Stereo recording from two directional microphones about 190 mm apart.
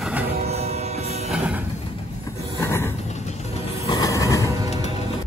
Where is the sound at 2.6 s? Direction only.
15° left (ahead or behind).